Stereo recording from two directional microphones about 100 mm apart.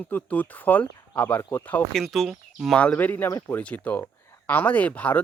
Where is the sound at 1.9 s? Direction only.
Centre (ahead or behind).